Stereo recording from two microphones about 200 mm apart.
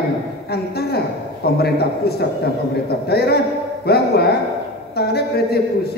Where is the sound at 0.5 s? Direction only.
50° left (ahead or behind).